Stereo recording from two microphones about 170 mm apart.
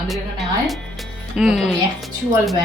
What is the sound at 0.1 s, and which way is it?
Speech, centre (ahead or behind).